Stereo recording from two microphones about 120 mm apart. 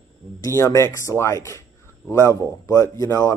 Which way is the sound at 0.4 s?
25° left (ahead or behind).